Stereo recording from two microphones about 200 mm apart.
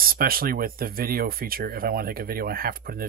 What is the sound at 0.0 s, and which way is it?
Speech, 50° right (ahead or behind).